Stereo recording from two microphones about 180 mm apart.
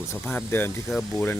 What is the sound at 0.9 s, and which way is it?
Speech, centre (ahead or behind).